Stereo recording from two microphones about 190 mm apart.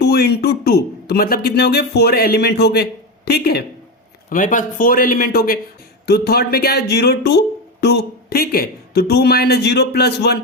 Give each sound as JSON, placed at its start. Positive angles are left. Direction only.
{"t": 0.0, "sound": "speech", "side_deg": 55}
{"t": 4.3, "sound": "speech", "side_deg": 45}